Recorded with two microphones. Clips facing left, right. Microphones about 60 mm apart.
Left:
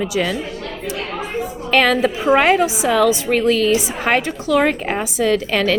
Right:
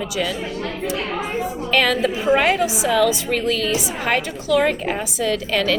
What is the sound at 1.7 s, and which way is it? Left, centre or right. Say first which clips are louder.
A woman's voice: left 4 dB; left.